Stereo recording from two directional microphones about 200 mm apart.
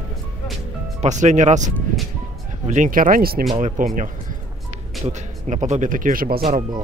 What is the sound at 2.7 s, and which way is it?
Speech, 40° right (ahead or behind).